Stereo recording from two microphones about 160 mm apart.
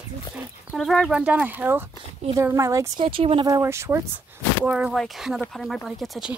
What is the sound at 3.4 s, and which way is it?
Speech, 20° right (ahead or behind).